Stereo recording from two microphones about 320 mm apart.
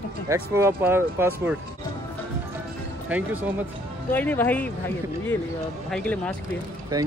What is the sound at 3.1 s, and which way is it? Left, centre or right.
Speech, centre.